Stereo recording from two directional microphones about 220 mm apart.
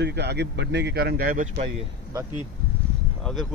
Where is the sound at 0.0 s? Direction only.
50° right (ahead or behind).